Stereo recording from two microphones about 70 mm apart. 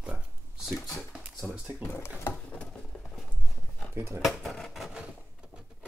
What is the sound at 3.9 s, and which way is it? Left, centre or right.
Speech, right.